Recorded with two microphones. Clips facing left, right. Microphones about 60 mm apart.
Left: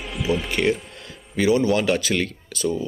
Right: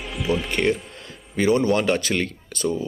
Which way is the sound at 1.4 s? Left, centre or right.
Right.